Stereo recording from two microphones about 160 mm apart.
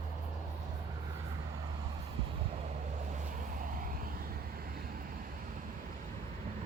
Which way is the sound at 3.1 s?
55° right (ahead or behind).